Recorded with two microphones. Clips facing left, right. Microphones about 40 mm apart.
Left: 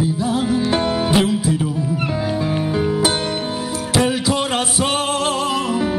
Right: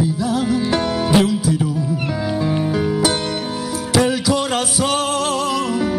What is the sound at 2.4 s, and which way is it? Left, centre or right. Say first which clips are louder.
Music: right 2 dB; centre.